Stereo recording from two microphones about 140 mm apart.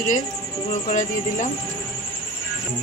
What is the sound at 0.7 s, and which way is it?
Speech, 65° left (ahead or behind).